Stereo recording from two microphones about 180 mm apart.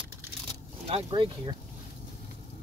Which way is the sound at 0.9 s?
30° right (ahead or behind).